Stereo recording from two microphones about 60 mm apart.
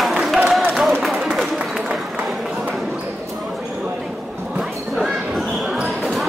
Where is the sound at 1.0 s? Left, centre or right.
Centre.